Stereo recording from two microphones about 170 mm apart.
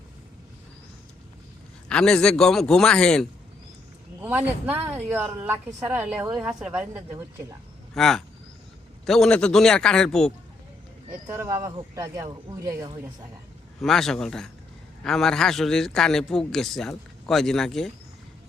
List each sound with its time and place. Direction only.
1.9 s a man's voice: 5° left (ahead or behind)
4.2 s a woman's voice: 10° right (ahead or behind)
7.9 s a man's voice: centre (ahead or behind)
11.3 s a woman's voice: 15° right (ahead or behind)
13.8 s a man's voice: centre (ahead or behind)